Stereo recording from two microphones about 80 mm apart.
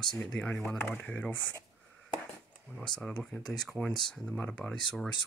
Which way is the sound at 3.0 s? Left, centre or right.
Centre.